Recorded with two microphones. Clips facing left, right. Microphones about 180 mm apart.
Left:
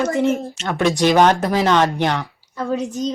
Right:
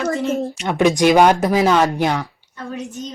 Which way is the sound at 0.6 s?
15° right (ahead or behind).